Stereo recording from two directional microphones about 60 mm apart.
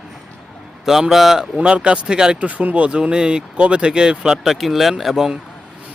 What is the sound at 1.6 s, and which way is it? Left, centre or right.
Speech, centre.